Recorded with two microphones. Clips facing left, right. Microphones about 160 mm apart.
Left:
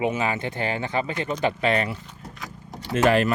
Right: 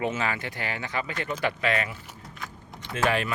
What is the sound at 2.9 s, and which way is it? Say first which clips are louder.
Speech: left 6 dB; 45° left (ahead or behind).